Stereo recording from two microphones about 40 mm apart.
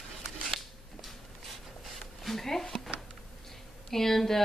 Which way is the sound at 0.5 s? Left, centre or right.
Centre.